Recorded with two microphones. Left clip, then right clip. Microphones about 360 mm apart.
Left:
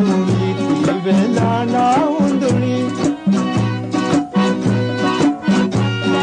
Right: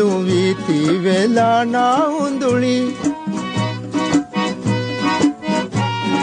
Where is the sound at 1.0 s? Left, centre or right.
Right.